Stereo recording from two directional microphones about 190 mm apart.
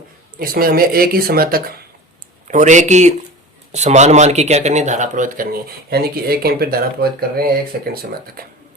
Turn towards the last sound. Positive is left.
turn(degrees=-55)  # may be behind; listen again after turning